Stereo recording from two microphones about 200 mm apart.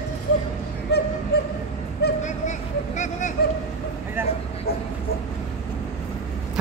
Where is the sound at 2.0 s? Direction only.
55° left (ahead or behind).